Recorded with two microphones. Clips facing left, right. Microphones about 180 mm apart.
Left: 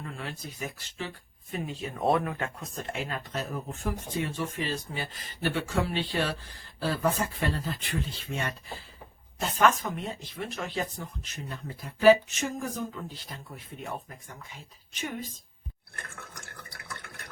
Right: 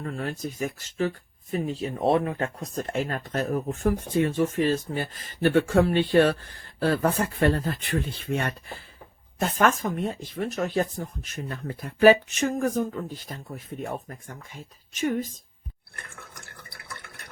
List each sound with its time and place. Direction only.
0.0 s speech: 45° right (ahead or behind)